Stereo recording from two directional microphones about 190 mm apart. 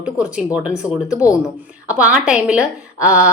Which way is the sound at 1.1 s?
15° left (ahead or behind).